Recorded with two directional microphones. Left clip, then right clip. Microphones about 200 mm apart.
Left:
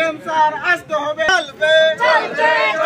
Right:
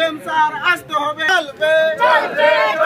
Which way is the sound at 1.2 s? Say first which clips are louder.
Left 1 dB; 15° right (ahead or behind).